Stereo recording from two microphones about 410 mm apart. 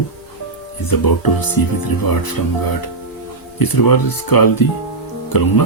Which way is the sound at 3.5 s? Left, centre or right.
Left.